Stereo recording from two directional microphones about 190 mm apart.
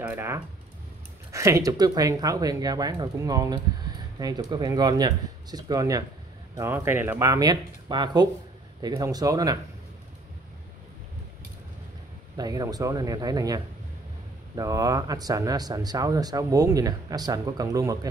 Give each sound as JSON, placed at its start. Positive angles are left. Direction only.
{"t": 0.0, "sound": "speech", "side_deg": -10}
{"t": 12.4, "sound": "speech", "side_deg": -20}